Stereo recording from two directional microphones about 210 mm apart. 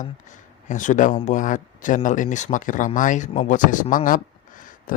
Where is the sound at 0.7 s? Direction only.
35° left (ahead or behind).